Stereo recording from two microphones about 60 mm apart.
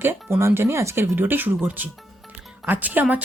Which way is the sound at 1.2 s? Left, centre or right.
Right.